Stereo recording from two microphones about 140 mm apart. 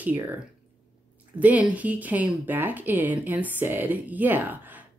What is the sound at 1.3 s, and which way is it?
Speech, 10° right (ahead or behind).